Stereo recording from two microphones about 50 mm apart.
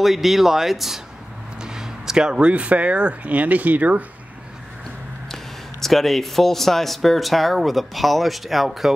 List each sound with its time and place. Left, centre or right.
0.0 s speech: centre; by 4.0 s right
5.3 s speech: centre